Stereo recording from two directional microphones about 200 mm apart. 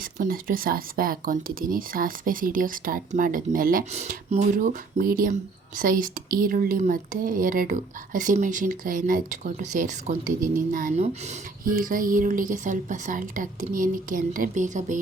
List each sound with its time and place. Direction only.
0.0 s speech: 45° right (ahead or behind)